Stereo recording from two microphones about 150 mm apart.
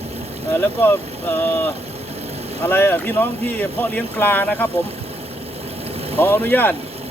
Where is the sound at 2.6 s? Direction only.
15° left (ahead or behind).